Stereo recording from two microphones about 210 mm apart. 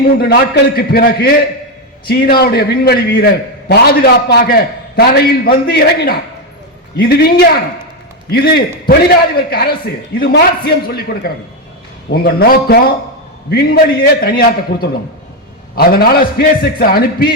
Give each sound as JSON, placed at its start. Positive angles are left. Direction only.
{"t": 0.2, "sound": "a man's voice", "side_deg": 50}